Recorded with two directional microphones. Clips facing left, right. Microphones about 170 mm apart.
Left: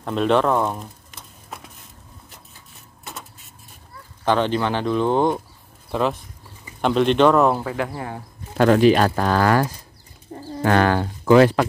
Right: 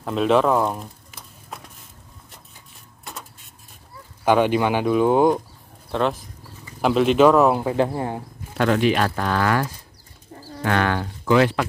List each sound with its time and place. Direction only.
0.0 s a sound: centre (ahead or behind)
3.1 s printer: centre (ahead or behind)
4.2 s speech: 10° right (ahead or behind)
5.9 s speech: centre (ahead or behind)
7.6 s speech: 30° right (ahead or behind)
8.5 s speech: 40° left (ahead or behind)